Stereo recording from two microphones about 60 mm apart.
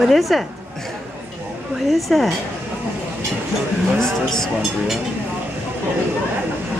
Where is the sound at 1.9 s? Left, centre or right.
Centre.